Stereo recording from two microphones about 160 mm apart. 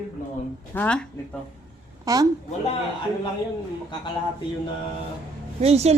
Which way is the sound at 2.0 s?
25° right (ahead or behind).